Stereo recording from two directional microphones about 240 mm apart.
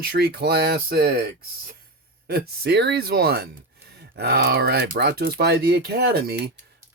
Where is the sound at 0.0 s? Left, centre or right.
Right.